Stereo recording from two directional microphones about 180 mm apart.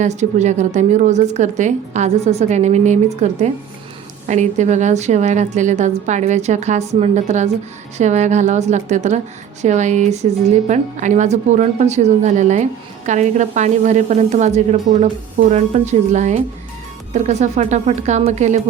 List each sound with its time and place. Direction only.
0.0 s a woman's voice: 40° right (ahead or behind)